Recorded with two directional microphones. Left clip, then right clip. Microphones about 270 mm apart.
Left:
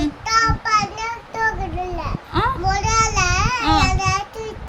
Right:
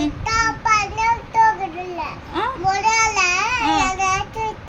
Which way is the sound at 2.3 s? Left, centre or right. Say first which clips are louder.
Left 2 dB; centre.